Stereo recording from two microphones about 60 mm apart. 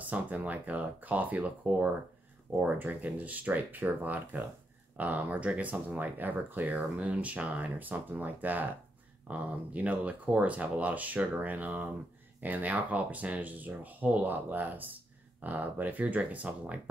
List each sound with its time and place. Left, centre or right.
0.0 s speech: right